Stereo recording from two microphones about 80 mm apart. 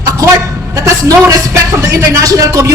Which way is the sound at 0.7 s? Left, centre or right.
Right.